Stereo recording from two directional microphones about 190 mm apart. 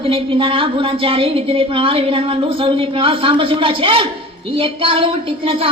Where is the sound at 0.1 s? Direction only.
30° right (ahead or behind).